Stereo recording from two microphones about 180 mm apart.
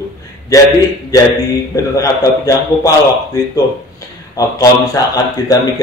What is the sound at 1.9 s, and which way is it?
Speech, 20° left (ahead or behind).